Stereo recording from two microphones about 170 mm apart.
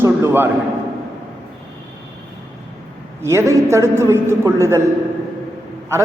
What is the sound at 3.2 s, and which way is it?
A man's voice, 15° right (ahead or behind).